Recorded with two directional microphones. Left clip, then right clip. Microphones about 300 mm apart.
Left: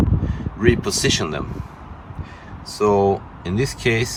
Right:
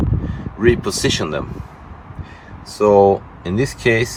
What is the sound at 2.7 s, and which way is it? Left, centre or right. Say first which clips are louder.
Speech: right 5 dB; centre.